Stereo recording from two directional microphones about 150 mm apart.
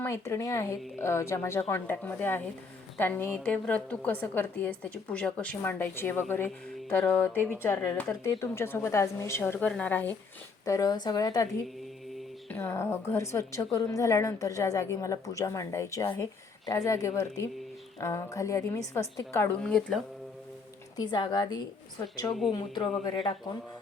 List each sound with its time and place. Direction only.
0.0 s a woman's voice: 15° left (ahead or behind)
10.7 s a woman's voice: 25° left (ahead or behind)
12.5 s a woman's voice: 15° left (ahead or behind)
20.9 s a woman's voice: 30° left (ahead or behind)